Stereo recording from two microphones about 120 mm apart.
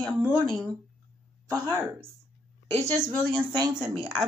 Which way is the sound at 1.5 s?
20° right (ahead or behind).